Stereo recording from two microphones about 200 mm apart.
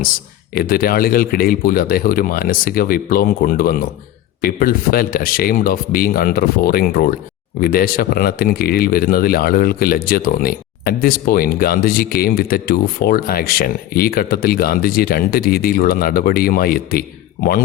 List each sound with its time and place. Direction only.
0.5 s speech: 50° left (ahead or behind)